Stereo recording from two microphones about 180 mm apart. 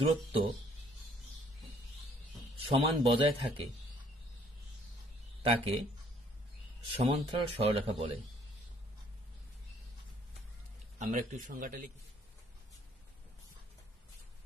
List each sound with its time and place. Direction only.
0.0 s speech: 30° right (ahead or behind)
2.5 s speech: 30° right (ahead or behind)
5.4 s speech: 30° right (ahead or behind)
7.0 s speech: 30° right (ahead or behind)
11.0 s a man's voice: 50° right (ahead or behind)